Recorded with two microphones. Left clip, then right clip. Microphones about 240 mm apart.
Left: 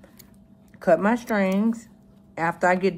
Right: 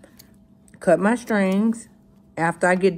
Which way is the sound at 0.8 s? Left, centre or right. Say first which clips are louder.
Right 1 dB; right.